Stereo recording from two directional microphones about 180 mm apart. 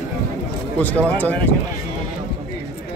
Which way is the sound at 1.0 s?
10° left (ahead or behind).